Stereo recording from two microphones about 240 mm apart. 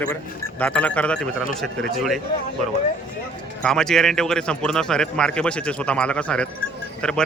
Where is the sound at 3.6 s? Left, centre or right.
Centre.